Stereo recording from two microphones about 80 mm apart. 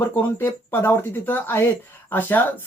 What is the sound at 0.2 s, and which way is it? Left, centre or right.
Speech, left.